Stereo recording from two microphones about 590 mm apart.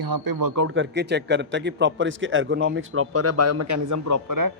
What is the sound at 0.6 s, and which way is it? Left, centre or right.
A man's voice, centre.